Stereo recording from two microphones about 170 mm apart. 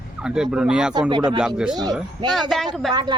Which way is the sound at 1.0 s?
25° right (ahead or behind).